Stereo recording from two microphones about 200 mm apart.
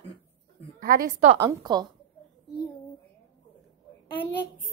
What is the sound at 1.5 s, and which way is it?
Speech, 20° right (ahead or behind).